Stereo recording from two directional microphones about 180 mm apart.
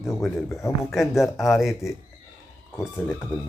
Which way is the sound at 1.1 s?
Centre (ahead or behind).